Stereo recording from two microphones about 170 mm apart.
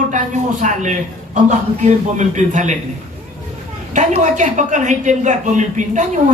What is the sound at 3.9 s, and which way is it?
A woman's voice, 45° right (ahead or behind).